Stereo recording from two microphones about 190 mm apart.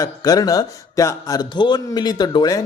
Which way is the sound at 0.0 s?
20° left (ahead or behind).